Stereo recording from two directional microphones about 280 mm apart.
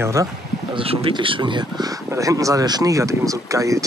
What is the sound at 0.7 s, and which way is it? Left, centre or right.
Speech, centre.